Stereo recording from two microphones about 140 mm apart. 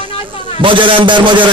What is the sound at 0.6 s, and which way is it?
Speech, 35° right (ahead or behind).